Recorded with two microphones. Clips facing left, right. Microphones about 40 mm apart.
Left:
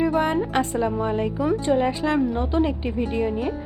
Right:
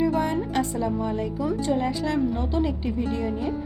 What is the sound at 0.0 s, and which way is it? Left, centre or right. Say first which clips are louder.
A woman's voice: left 2 dB; left.